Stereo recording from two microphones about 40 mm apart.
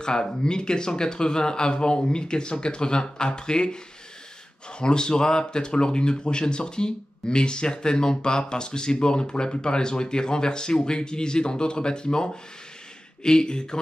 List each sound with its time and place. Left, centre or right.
0.0 s speech: centre